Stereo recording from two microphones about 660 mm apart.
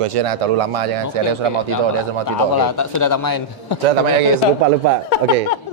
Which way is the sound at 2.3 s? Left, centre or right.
Left.